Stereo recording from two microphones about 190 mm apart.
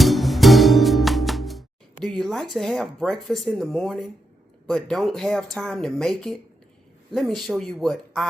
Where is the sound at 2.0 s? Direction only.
Centre (ahead or behind).